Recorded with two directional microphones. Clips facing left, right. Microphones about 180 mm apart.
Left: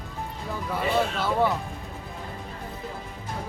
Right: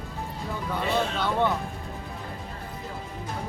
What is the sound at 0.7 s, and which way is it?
Speech, 5° left (ahead or behind).